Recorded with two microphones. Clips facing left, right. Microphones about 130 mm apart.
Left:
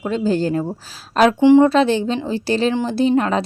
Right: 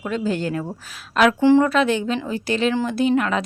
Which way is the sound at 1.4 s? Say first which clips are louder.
Left 6 dB; 20° left (ahead or behind).